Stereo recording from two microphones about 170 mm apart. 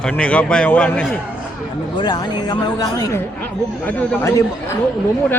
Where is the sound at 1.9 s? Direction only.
25° left (ahead or behind).